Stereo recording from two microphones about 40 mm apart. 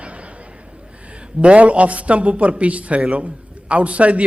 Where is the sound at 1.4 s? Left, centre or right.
Right.